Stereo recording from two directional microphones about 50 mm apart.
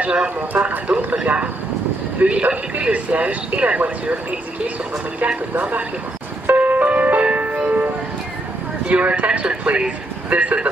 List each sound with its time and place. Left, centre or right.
0.0 s speech: right
5.5 s speech: right
6.4 s music: right
8.8 s speech: right